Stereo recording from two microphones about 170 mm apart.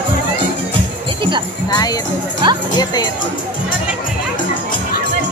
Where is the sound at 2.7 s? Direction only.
25° left (ahead or behind).